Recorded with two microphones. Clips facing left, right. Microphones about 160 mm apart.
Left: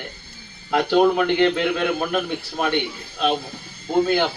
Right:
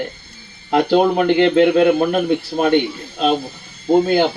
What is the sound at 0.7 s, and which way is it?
A man's voice, 35° right (ahead or behind).